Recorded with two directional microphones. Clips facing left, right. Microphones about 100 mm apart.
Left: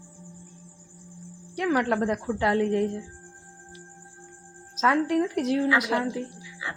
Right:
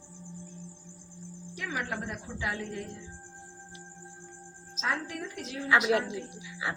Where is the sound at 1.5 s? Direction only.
60° left (ahead or behind).